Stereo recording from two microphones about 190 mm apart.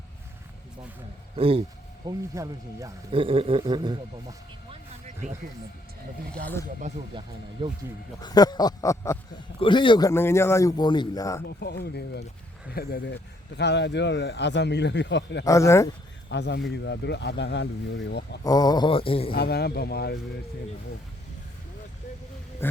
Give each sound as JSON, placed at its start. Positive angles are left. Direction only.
{"t": 1.4, "sound": "speech", "side_deg": -30}
{"t": 2.0, "sound": "speech", "side_deg": -15}
{"t": 3.1, "sound": "a man's voice", "side_deg": -30}
{"t": 6.4, "sound": "speech", "side_deg": 10}
{"t": 7.6, "sound": "a man's voice", "side_deg": -30}
{"t": 8.2, "sound": "a man's voice", "side_deg": 20}
{"t": 11.4, "sound": "speech", "side_deg": 60}
{"t": 15.4, "sound": "speech", "side_deg": 15}
{"t": 16.3, "sound": "speech", "side_deg": 65}
{"t": 18.4, "sound": "a man's voice", "side_deg": 20}
{"t": 19.3, "sound": "speech", "side_deg": 55}
{"t": 22.6, "sound": "a sound", "side_deg": 10}